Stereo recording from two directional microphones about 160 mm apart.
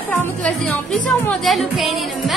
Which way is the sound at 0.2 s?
15° left (ahead or behind).